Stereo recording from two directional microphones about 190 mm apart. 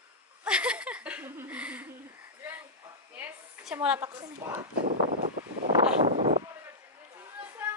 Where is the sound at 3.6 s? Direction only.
5° right (ahead or behind).